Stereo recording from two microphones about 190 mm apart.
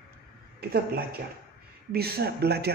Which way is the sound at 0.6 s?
55° right (ahead or behind).